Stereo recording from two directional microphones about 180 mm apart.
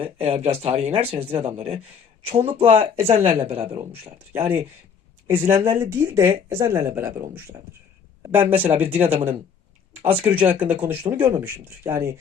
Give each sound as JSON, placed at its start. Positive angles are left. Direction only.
{"t": 0.0, "sound": "speech", "side_deg": -35}
{"t": 4.3, "sound": "speech", "side_deg": -10}